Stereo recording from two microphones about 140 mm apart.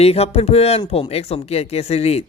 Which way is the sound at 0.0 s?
45° left (ahead or behind).